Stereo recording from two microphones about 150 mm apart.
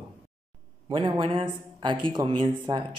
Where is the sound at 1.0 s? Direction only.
35° right (ahead or behind).